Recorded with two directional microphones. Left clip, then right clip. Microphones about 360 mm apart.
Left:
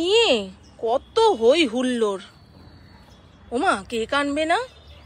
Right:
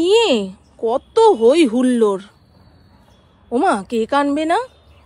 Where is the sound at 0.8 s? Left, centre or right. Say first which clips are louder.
Right 6 dB; centre.